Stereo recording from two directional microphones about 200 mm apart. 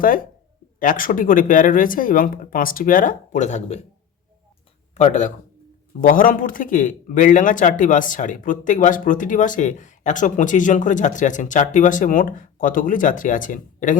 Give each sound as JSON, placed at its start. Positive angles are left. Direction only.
{"t": 0.8, "sound": "speech", "side_deg": 45}
{"t": 4.9, "sound": "a man's voice", "side_deg": 35}